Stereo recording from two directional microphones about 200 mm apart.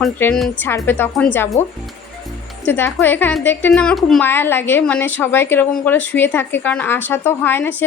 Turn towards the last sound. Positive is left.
turn(degrees=10)  # may be behind; listen again after turning